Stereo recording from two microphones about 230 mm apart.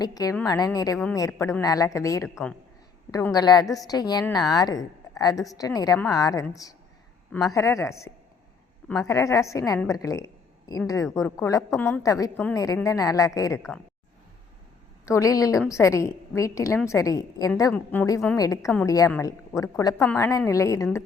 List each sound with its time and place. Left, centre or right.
0.0 s a woman's voice: centre
3.1 s a woman's voice: centre
15.0 s a woman's voice: centre